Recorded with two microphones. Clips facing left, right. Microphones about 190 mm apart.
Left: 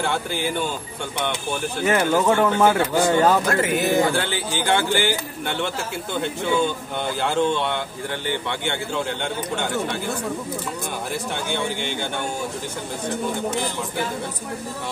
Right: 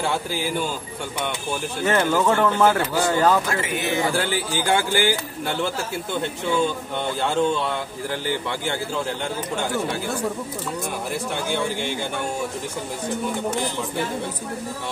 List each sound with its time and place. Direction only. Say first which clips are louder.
0.1 s speech: even; 5° right (ahead or behind)
1.9 s speech: left 1 dB; 15° left (ahead or behind)
3.4 s speech: left 5 dB; 40° left (ahead or behind)
4.6 s speech: left 1 dB; 10° right (ahead or behind)
6.2 s speech: left 1 dB; centre (ahead or behind)